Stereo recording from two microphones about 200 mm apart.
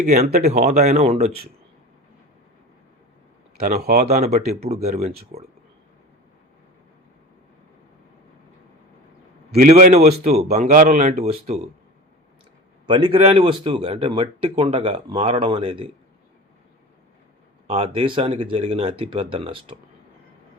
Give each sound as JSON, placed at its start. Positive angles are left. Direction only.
{"t": 0.0, "sound": "speech", "side_deg": -40}
{"t": 3.6, "sound": "speech", "side_deg": -50}
{"t": 4.0, "sound": "speech", "side_deg": -30}
{"t": 9.6, "sound": "speech", "side_deg": -35}
{"t": 12.9, "sound": "speech", "side_deg": -25}
{"t": 17.7, "sound": "speech", "side_deg": -30}